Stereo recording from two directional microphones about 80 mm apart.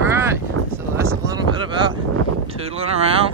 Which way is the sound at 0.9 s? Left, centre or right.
Right.